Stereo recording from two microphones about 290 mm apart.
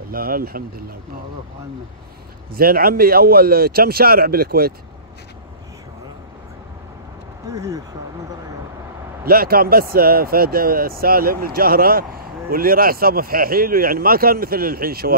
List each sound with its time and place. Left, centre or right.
0.1 s speech: right
2.5 s speech: right
7.5 s speech: centre
9.2 s speech: right